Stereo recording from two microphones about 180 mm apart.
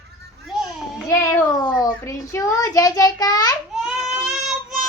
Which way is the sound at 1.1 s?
15° left (ahead or behind).